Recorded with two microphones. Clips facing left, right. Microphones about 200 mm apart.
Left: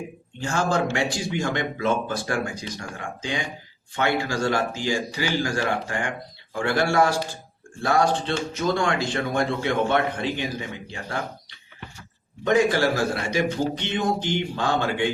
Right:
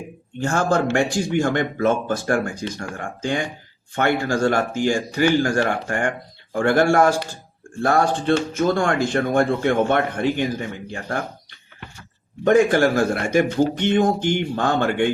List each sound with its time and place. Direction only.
0.3 s a man's voice: 50° right (ahead or behind)
12.5 s a man's voice: 50° right (ahead or behind)